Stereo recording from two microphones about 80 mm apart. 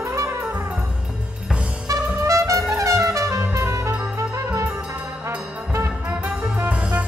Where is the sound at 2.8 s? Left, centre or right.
Right.